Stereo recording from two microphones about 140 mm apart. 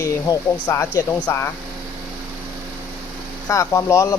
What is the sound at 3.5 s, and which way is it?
Speech, 20° left (ahead or behind).